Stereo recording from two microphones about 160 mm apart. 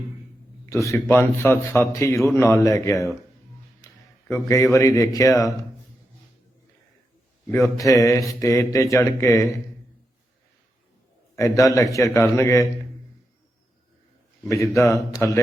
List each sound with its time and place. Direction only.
0.6 s a man's voice: 20° left (ahead or behind)
4.3 s a man's voice: 15° left (ahead or behind)
7.8 s a man's voice: 20° left (ahead or behind)
11.3 s a man's voice: 20° left (ahead or behind)
14.5 s a man's voice: 20° left (ahead or behind)